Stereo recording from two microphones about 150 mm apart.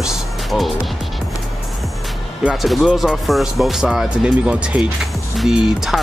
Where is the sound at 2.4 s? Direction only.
5° right (ahead or behind).